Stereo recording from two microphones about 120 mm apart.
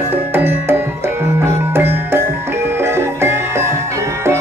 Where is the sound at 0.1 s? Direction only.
15° right (ahead or behind).